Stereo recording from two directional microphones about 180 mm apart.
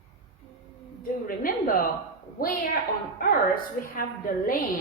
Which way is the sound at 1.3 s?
55° left (ahead or behind).